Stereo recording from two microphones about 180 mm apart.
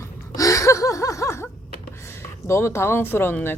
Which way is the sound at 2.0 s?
15° left (ahead or behind).